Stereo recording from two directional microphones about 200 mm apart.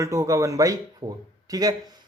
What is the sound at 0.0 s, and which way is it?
Speech, 15° right (ahead or behind).